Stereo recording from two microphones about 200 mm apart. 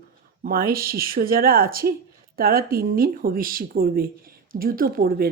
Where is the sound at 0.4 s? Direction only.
50° right (ahead or behind).